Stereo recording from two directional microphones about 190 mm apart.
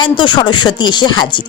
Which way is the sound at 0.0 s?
25° left (ahead or behind).